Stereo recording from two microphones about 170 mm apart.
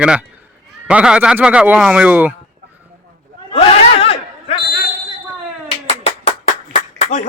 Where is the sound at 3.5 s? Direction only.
35° left (ahead or behind).